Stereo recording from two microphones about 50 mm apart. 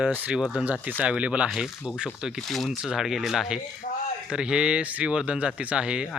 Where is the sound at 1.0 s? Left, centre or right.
Right.